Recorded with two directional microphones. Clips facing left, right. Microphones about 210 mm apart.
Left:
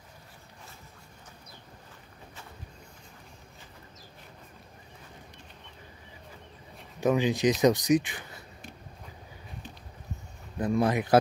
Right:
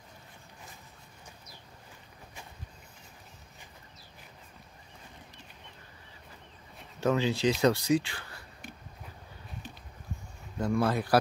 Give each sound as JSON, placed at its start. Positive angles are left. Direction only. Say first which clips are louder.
{"t": 7.0, "sound": "speech", "louder": "left 2 dB", "side_deg": 15}
{"t": 10.6, "sound": "speech", "louder": "left 2 dB", "side_deg": 20}